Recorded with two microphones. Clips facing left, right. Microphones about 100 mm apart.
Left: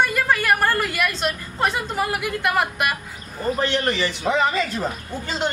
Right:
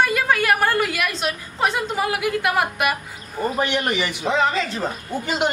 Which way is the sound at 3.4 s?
15° right (ahead or behind).